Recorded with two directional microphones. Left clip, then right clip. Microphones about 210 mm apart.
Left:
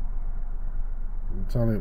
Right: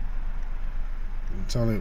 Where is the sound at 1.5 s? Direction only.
Centre (ahead or behind).